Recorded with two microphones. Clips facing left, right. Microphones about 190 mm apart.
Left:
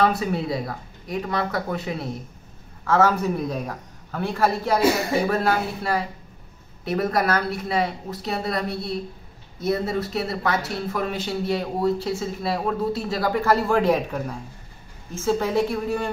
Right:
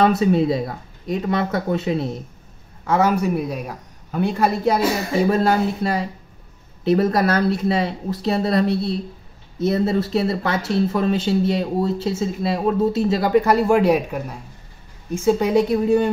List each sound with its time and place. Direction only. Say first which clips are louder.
0.0 s speech: right 6 dB; 20° right (ahead or behind)
15.2 s speech: right 5 dB; 15° right (ahead or behind)